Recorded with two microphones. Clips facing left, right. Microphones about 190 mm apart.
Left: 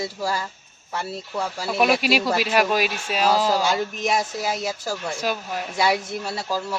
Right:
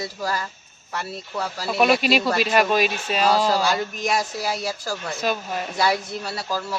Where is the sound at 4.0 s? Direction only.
20° left (ahead or behind).